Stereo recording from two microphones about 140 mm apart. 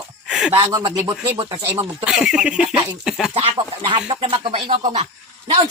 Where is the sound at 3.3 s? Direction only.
35° right (ahead or behind).